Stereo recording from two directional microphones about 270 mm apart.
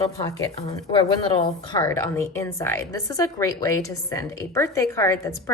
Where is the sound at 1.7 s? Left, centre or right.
Centre.